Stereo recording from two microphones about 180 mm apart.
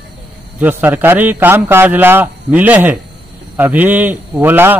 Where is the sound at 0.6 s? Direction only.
10° right (ahead or behind).